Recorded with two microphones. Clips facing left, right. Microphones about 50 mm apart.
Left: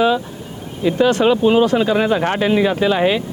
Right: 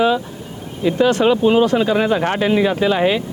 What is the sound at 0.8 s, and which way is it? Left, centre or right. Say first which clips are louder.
Speech: even; centre.